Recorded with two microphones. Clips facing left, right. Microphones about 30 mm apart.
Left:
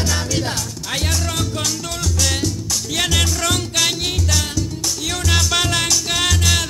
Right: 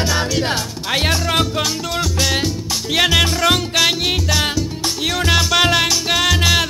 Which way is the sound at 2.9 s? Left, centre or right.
Right.